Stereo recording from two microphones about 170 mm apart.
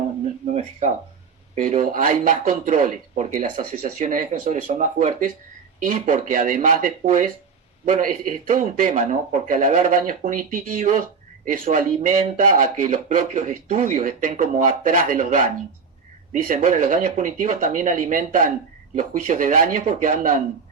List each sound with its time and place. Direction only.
1.6 s speech: 50° right (ahead or behind)
16.6 s speech: 50° right (ahead or behind)